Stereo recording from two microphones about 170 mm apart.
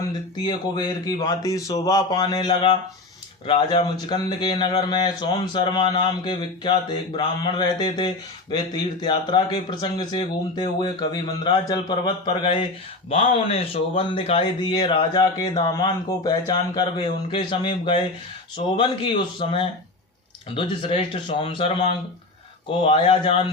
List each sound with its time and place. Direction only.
0.3 s speech: 25° left (ahead or behind)